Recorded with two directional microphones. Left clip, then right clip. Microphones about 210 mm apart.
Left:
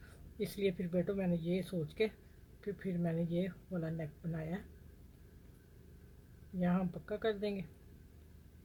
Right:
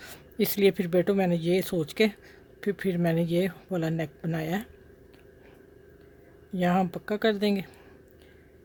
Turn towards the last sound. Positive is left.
turn(degrees=-55)  # may be behind; listen again after turning